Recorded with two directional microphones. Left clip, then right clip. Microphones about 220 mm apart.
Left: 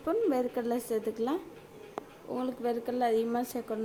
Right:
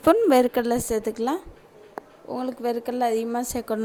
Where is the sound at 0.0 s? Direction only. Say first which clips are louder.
Right 12 dB; 45° right (ahead or behind).